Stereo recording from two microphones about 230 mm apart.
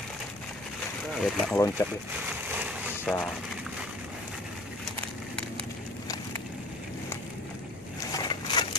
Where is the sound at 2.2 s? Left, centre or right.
Centre.